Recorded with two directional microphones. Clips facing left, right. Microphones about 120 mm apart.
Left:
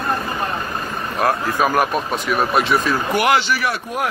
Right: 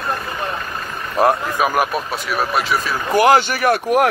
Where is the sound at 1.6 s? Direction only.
10° right (ahead or behind).